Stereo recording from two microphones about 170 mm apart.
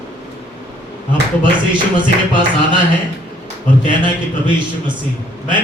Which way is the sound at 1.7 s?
30° right (ahead or behind).